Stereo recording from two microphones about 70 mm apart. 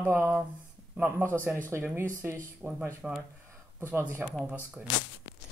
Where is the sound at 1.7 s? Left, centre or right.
Right.